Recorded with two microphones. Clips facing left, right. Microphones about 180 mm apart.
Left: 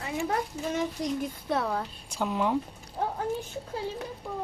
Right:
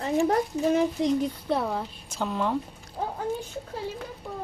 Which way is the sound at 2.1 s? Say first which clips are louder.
Even; 10° left (ahead or behind).